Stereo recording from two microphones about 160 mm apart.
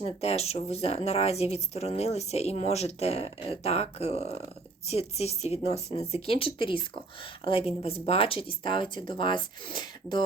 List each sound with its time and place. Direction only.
0.0 s speech: 40° left (ahead or behind)